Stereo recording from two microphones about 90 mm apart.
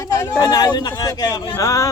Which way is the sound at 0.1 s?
40° left (ahead or behind).